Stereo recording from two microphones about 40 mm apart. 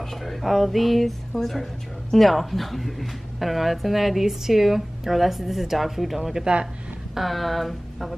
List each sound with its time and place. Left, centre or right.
0.0 s speech: centre
6.4 s speech: centre
7.2 s speech: centre